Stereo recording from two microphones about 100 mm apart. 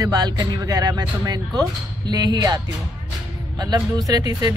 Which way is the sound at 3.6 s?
40° right (ahead or behind).